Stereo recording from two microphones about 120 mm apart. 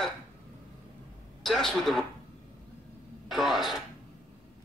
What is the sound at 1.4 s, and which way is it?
Speech, centre (ahead or behind).